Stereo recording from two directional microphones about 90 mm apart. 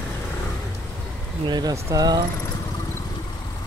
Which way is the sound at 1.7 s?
35° right (ahead or behind).